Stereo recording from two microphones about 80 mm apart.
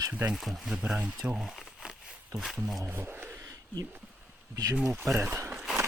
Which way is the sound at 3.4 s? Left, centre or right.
Right.